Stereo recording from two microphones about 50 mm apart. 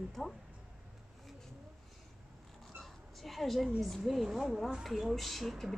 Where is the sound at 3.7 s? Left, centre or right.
Centre.